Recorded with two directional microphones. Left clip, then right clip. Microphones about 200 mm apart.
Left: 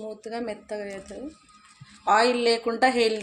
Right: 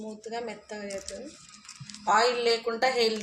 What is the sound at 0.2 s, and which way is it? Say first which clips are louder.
Speech: left 3 dB; 55° left (ahead or behind).